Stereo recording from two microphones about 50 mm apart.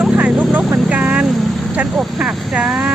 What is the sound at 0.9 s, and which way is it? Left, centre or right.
Vehicle, right.